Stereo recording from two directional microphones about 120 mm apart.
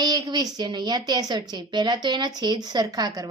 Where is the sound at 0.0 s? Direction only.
30° right (ahead or behind).